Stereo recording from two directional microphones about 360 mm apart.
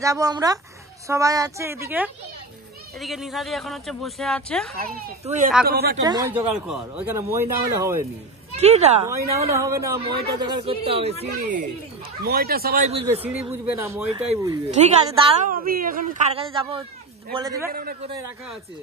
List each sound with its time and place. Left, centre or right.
0.0 s speech: centre
4.7 s speech: right
6.0 s speech: centre
13.0 s speech: centre
17.6 s speech: right
18.1 s speech: centre